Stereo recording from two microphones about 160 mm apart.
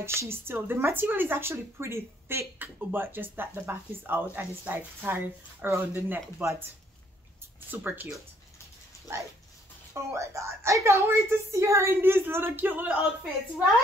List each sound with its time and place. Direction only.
0.0 s speech: 15° right (ahead or behind)
7.7 s speech: 10° right (ahead or behind)
9.1 s speech: 15° right (ahead or behind)